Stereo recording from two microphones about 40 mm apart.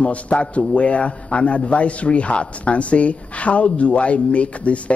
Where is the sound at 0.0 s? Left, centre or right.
Left.